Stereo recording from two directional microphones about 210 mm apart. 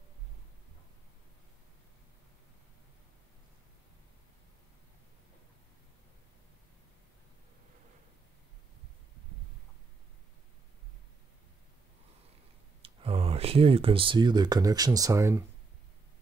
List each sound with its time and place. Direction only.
12.8 s speech: 25° right (ahead or behind)